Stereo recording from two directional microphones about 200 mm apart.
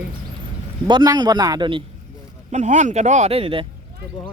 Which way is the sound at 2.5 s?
35° right (ahead or behind).